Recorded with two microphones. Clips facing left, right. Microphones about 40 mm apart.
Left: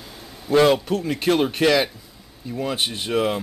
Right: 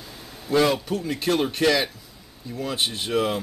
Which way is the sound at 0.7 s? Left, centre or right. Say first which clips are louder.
Left 4 dB; centre.